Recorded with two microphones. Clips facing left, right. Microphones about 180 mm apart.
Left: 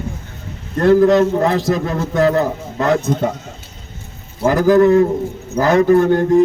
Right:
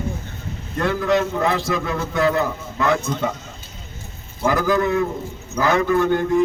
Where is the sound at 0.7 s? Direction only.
40° left (ahead or behind).